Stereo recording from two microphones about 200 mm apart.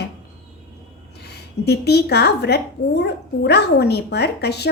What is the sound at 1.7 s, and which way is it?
A woman's voice, 55° left (ahead or behind).